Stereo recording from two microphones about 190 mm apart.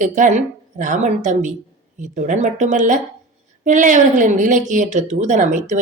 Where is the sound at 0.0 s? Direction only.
40° right (ahead or behind).